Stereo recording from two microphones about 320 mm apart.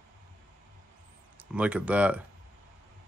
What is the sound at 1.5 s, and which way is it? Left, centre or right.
Speech, centre.